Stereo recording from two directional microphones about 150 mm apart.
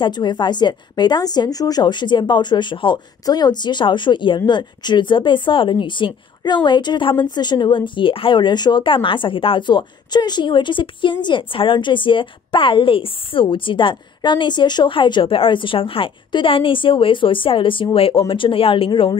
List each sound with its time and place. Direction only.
0.0 s a woman's voice: 30° left (ahead or behind)